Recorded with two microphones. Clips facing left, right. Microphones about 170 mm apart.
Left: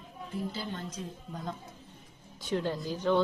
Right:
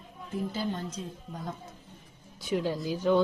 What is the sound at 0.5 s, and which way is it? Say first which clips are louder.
Speech: right 5 dB; 45° right (ahead or behind).